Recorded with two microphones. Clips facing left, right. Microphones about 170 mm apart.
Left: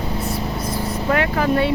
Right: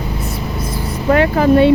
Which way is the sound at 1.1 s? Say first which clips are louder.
Right 8 dB; 30° right (ahead or behind).